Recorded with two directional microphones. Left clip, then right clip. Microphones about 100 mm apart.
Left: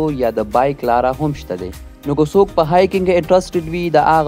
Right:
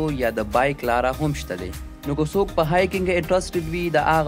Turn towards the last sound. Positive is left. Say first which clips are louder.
# left 7 dB
turn(degrees=40)  # may be behind; listen again after turning